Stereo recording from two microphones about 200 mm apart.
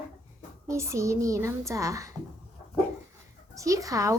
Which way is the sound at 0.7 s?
15° right (ahead or behind).